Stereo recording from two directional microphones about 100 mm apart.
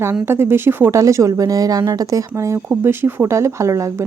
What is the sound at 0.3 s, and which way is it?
Speech, 25° right (ahead or behind).